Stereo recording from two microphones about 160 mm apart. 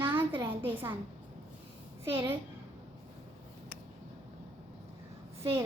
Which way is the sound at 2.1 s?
15° right (ahead or behind).